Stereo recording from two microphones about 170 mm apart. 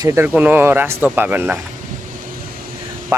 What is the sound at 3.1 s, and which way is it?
Speech, 15° right (ahead or behind).